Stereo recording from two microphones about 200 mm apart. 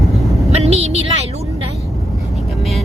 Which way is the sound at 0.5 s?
30° right (ahead or behind).